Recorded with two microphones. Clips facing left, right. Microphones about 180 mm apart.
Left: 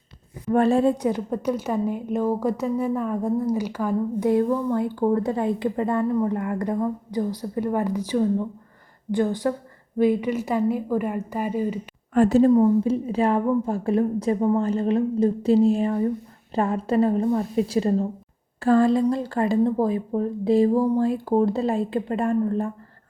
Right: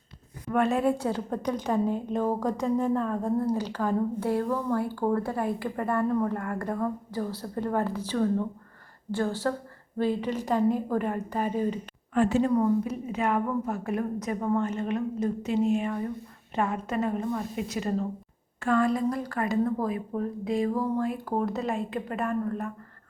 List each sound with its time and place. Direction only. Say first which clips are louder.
0.5 s a woman's voice: left 6 dB; 30° left (ahead or behind)
0.9 s speech: left 5 dB; 15° left (ahead or behind)
12.1 s a woman's voice: left 6 dB; 40° left (ahead or behind)
12.5 s a woman's voice: left 7 dB; 25° left (ahead or behind)